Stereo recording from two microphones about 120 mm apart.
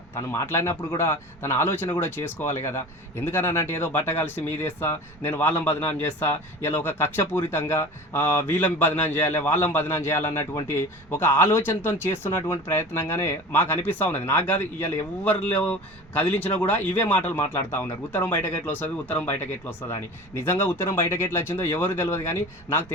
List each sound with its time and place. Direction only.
0.3 s speech: 20° left (ahead or behind)